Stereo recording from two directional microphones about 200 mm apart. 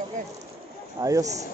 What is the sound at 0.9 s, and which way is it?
Speech, 15° right (ahead or behind).